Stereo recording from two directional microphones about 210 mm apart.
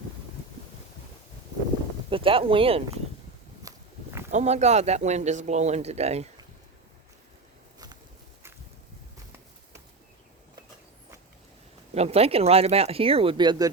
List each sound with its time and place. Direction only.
2.0 s speech: 25° right (ahead or behind)
3.6 s walk: 15° right (ahead or behind)
4.3 s a man's voice: 35° right (ahead or behind)
11.9 s speech: 30° right (ahead or behind)